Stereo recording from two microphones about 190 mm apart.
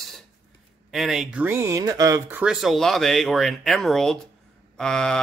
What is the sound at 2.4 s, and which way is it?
Speech, 5° right (ahead or behind).